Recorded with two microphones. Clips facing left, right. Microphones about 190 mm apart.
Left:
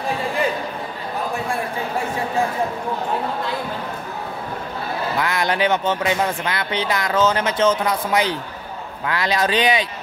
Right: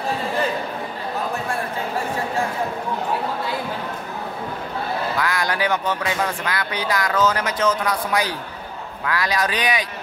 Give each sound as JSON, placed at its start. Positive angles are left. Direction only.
{"t": 5.2, "sound": "speech", "side_deg": 25}